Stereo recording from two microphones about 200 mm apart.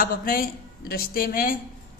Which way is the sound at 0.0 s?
45° left (ahead or behind).